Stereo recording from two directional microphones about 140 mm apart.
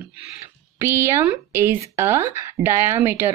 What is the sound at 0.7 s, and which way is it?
Speech, 20° right (ahead or behind).